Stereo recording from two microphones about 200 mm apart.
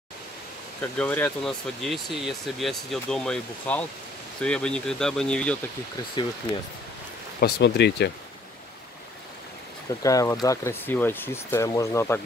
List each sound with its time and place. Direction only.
0.7 s speech: 5° left (ahead or behind)
7.3 s speech: 50° left (ahead or behind)
10.0 s speech: 15° left (ahead or behind)